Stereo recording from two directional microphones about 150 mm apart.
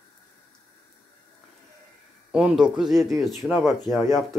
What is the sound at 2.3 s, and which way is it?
Speech, 5° right (ahead or behind).